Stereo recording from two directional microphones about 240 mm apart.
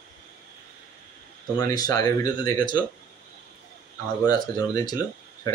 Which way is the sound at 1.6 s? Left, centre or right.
Centre.